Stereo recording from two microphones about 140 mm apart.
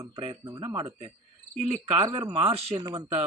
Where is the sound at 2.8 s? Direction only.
25° right (ahead or behind).